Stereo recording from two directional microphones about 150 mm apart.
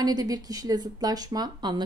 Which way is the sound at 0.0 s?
25° right (ahead or behind).